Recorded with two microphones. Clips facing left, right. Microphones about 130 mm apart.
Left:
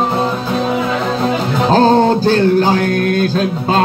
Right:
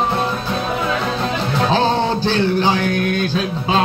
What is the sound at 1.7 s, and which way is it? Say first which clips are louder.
Music: left 8 dB; 45° left (ahead or behind).